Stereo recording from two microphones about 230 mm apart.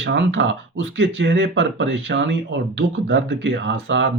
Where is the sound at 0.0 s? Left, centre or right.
Right.